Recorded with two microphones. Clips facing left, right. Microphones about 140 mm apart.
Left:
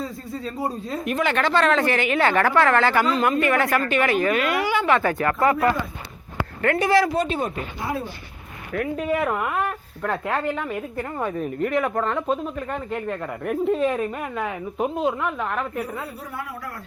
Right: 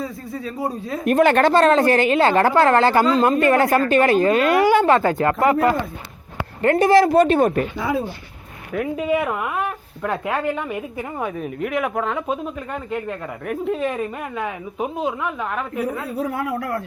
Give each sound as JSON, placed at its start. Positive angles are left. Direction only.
{"t": 1.0, "sound": "a woman's voice", "side_deg": -50}
{"t": 4.5, "sound": "speech", "side_deg": -45}
{"t": 4.9, "sound": "speech", "side_deg": -30}
{"t": 6.7, "sound": "speech", "side_deg": -45}
{"t": 9.0, "sound": "speech", "side_deg": 0}
{"t": 16.2, "sound": "a man's voice", "side_deg": -85}